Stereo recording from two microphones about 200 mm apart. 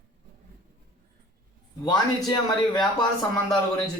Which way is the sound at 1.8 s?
20° left (ahead or behind).